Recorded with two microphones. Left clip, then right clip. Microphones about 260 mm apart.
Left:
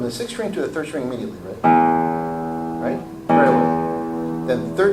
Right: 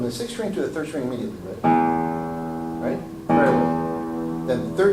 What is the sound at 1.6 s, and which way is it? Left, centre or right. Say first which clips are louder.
Music: left 5 dB; centre.